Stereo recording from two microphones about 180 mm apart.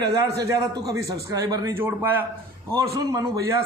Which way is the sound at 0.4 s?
20° right (ahead or behind).